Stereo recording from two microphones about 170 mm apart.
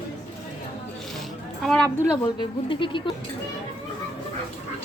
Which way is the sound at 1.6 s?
5° left (ahead or behind).